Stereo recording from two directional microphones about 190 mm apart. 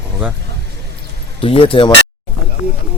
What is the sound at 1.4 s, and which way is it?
Speech, 30° left (ahead or behind).